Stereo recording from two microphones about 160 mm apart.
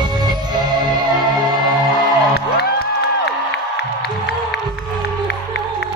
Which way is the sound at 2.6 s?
85° left.